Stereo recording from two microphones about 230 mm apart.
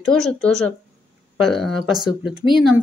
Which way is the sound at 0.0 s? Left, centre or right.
Centre.